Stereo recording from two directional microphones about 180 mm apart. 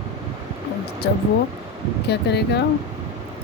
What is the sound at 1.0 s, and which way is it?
Speech, 65° left (ahead or behind).